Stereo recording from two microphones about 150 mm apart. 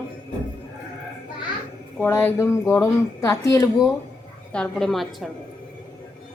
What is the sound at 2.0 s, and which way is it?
A woman's voice, 15° left (ahead or behind).